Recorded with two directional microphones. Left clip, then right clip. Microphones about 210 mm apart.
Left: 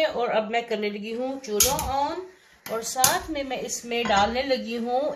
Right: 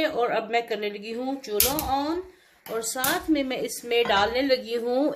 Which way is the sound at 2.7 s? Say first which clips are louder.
Left 3 dB; 40° right (ahead or behind).